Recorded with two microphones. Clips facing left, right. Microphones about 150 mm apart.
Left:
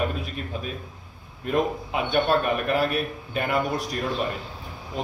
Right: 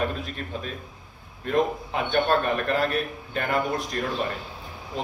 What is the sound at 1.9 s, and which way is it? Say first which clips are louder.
A man's voice: left 1 dB; 10° left (ahead or behind).